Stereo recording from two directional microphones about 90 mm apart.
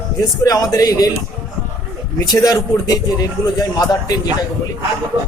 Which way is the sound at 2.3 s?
45° left (ahead or behind).